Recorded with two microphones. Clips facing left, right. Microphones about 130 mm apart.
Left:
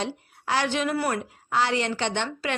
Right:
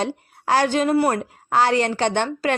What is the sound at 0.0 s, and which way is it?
A woman's voice, 45° right (ahead or behind).